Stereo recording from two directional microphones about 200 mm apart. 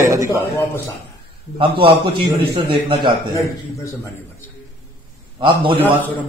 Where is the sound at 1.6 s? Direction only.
25° right (ahead or behind).